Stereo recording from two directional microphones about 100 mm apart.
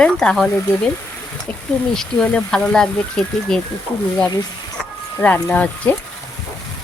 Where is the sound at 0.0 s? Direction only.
10° left (ahead or behind).